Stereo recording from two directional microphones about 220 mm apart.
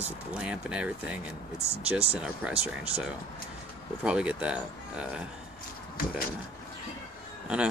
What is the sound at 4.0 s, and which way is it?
Speech, 5° right (ahead or behind).